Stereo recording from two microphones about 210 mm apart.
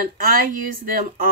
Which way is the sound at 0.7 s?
40° right (ahead or behind).